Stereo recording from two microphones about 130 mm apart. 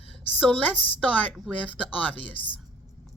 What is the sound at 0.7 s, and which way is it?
Speech, 45° left (ahead or behind).